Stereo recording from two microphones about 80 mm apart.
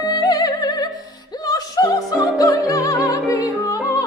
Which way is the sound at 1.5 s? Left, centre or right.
Left.